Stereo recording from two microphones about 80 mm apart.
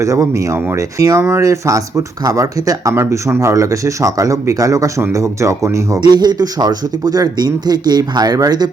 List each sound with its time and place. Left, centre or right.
0.0 s speech: right
6.0 s speech: right